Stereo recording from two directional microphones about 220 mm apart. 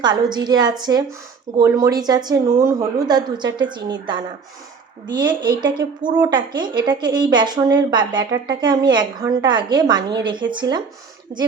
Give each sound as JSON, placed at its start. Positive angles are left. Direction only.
{"t": 0.3, "sound": "a woman's voice", "side_deg": -20}
{"t": 11.3, "sound": "speech", "side_deg": -45}